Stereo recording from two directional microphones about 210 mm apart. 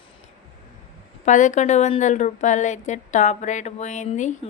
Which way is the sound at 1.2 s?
35° left (ahead or behind).